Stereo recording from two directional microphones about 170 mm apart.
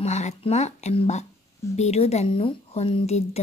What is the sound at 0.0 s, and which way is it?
A woman's voice, 40° left (ahead or behind).